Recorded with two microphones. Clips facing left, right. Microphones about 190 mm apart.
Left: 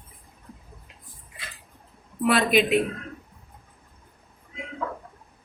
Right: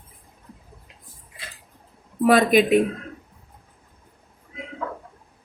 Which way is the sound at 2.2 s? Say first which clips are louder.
Right 5 dB; 45° right (ahead or behind).